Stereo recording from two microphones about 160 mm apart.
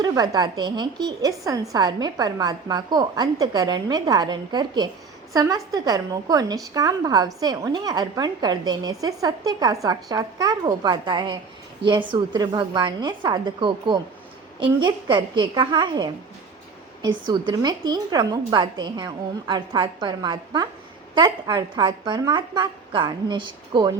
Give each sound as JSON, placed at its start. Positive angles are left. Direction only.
{"t": 0.0, "sound": "a woman's voice", "side_deg": -25}